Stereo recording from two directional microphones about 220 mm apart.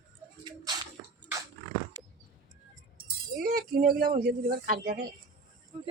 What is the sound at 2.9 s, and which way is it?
Speech, 40° right (ahead or behind).